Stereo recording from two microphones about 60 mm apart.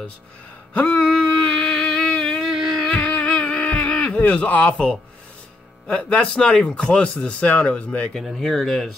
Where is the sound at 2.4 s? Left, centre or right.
Centre.